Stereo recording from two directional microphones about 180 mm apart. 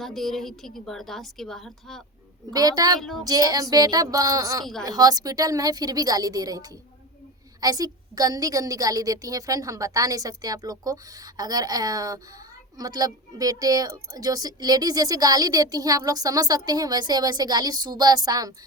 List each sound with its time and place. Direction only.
0.0 s a woman's voice: centre (ahead or behind)
2.5 s speech: 20° right (ahead or behind)
3.0 s a woman's voice: centre (ahead or behind)
3.2 s speech: 20° right (ahead or behind)
4.6 s a woman's voice: centre (ahead or behind)
4.9 s speech: 20° right (ahead or behind)